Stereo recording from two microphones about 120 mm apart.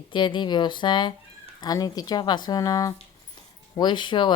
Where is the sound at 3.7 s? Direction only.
40° left (ahead or behind).